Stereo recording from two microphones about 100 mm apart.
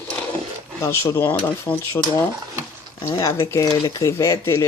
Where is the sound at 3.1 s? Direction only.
40° left (ahead or behind).